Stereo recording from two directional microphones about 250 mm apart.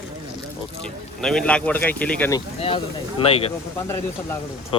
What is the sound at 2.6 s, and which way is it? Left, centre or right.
Speech, left.